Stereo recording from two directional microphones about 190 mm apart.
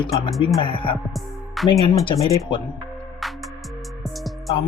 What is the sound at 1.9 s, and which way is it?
Speech, 25° left (ahead or behind).